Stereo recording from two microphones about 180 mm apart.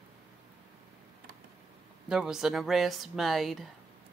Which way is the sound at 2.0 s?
5° right (ahead or behind).